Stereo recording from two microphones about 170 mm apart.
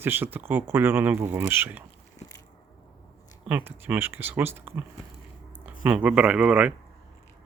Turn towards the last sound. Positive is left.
turn(degrees=-5)  # may be behind; listen again after turning